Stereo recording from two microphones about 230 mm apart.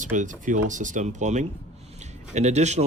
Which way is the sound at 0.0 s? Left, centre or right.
Right.